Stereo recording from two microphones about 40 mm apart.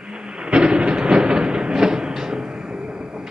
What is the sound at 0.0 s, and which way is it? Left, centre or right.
Thunder, right.